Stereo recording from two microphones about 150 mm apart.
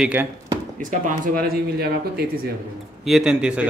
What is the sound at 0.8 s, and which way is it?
Speech, 70° right (ahead or behind).